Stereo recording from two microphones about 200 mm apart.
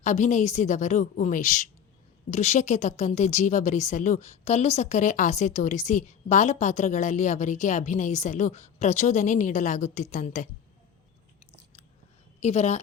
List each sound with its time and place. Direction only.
0.0 s speech: 35° left (ahead or behind)
12.4 s speech: 35° left (ahead or behind)